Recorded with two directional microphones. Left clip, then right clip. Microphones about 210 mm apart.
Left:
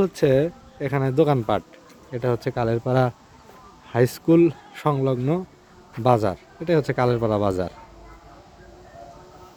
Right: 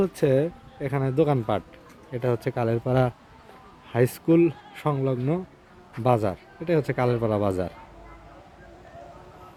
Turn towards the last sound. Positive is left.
turn(degrees=5)  # may be behind; listen again after turning